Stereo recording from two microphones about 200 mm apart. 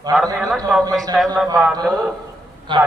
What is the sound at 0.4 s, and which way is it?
Speech, 5° left (ahead or behind).